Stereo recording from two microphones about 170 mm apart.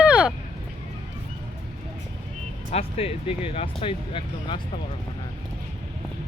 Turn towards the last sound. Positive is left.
turn(degrees=30)  # may be behind; listen again after turning